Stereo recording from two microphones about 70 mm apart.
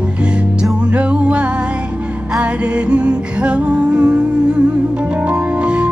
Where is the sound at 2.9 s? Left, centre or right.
Centre.